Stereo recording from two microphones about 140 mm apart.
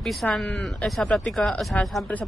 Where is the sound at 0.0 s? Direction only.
Centre (ahead or behind).